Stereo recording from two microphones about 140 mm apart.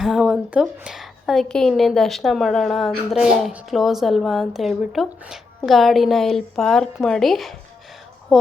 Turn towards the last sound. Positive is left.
turn(degrees=0)  # may be behind; listen again after turning